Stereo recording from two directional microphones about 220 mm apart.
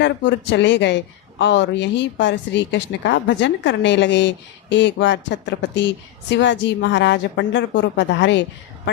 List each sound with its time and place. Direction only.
0.0 s a woman's voice: 55° left (ahead or behind)